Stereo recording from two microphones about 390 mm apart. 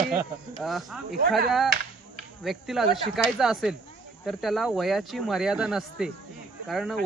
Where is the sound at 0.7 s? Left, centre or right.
Centre.